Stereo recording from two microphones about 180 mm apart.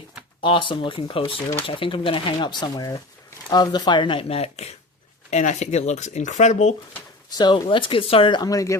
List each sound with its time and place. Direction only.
0.4 s speech: 25° left (ahead or behind)
7.3 s speech: 25° left (ahead or behind)